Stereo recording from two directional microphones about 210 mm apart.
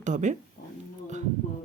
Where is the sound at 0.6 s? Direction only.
50° left (ahead or behind).